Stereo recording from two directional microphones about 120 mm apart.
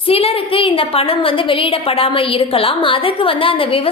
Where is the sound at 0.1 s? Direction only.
55° left (ahead or behind).